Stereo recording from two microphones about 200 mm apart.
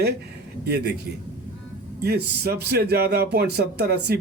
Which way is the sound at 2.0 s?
50° right (ahead or behind).